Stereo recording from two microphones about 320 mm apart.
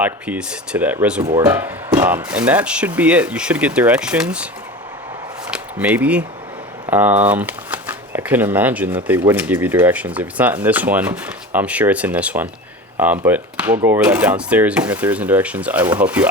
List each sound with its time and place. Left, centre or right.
0.0 s speech: centre
1.2 s speech: centre
5.5 s a sound: centre
6.8 s speech: centre